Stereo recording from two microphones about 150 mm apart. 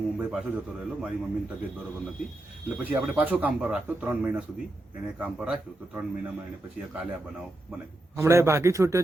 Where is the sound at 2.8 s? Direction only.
5° right (ahead or behind).